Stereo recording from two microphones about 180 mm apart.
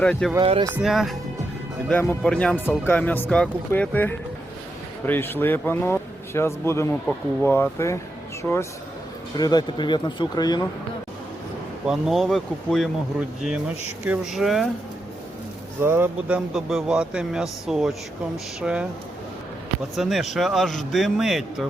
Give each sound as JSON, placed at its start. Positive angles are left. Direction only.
{"t": 0.0, "sound": "speech", "side_deg": 5}
{"t": 11.9, "sound": "speech", "side_deg": 0}
{"t": 15.8, "sound": "speech", "side_deg": -15}
{"t": 20.0, "sound": "speech", "side_deg": 0}